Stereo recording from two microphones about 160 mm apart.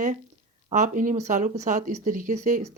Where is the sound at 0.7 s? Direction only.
50° right (ahead or behind).